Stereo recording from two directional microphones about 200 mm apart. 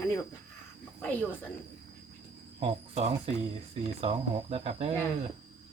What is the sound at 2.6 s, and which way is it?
Speech, 30° right (ahead or behind).